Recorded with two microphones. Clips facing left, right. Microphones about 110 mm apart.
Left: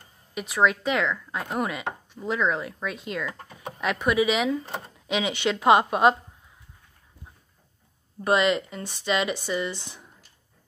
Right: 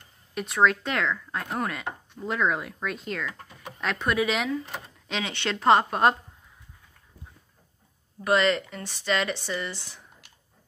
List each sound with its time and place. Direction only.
0.3 s speech: 5° left (ahead or behind)
8.2 s speech: 20° left (ahead or behind)